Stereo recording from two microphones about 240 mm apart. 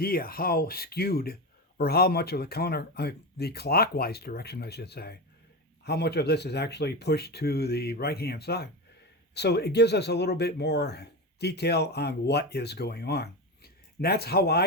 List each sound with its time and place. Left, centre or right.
0.0 s speech: left